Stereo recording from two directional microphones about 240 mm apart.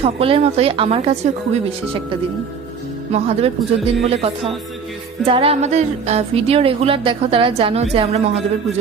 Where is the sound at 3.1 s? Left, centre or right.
Right.